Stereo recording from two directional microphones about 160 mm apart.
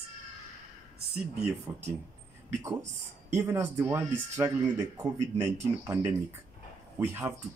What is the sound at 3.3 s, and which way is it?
Speech, 15° right (ahead or behind).